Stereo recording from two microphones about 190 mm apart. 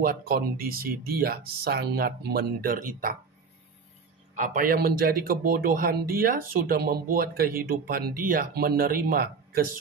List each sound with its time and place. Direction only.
0.0 s a man's voice: 50° right (ahead or behind)
4.4 s a man's voice: 45° right (ahead or behind)